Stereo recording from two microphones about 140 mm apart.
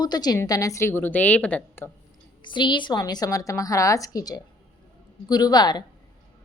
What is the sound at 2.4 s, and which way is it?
A woman's voice, 35° left (ahead or behind).